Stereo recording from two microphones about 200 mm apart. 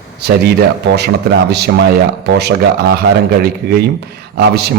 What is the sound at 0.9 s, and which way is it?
A man's voice, 55° right (ahead or behind).